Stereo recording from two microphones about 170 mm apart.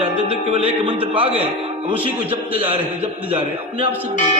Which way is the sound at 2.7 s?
35° right (ahead or behind).